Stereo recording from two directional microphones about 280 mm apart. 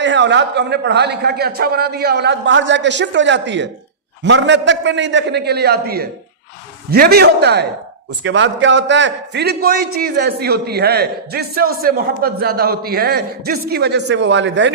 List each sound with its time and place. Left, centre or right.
0.0 s a man's voice: right